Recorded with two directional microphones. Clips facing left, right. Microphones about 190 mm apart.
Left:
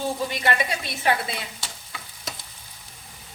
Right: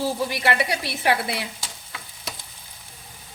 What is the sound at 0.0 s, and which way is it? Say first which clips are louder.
A woman's voice: right 2 dB; 70° right (ahead or behind).